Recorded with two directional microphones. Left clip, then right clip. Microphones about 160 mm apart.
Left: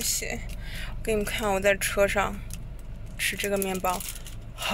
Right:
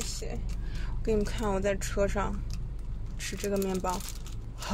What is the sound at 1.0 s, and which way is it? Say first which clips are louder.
Speech: left 3 dB; 5° right (ahead or behind).